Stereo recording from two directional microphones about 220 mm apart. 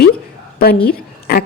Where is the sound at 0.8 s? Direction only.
40° left (ahead or behind).